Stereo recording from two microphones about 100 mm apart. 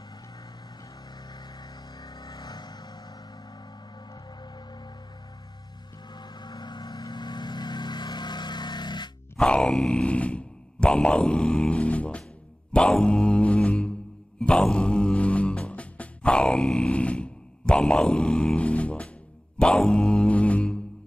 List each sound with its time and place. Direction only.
1.6 s music: 40° left (ahead or behind)
6.1 s vehicle: 45° left (ahead or behind)
9.4 s speech: 5° left (ahead or behind)
12.7 s music: 10° left (ahead or behind)